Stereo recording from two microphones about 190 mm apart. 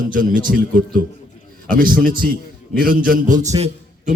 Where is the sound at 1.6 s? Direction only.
50° right (ahead or behind).